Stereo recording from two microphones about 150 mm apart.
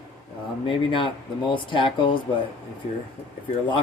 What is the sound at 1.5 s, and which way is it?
Speech, 35° left (ahead or behind).